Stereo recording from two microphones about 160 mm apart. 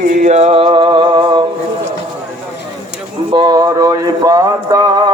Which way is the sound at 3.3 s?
25° right (ahead or behind).